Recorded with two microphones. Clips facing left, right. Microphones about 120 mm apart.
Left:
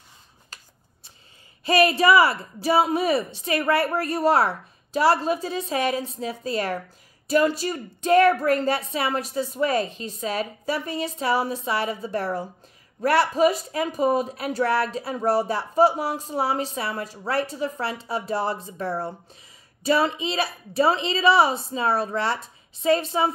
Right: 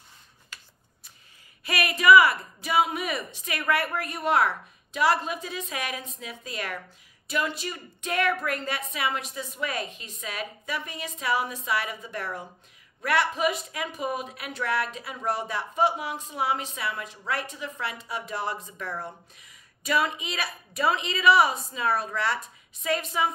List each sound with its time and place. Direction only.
1.6 s speech: 30° left (ahead or behind)